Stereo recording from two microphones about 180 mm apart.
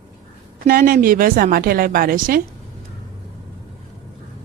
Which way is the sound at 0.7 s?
55° right (ahead or behind).